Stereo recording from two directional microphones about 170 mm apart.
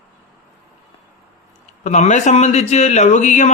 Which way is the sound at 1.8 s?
45° left (ahead or behind).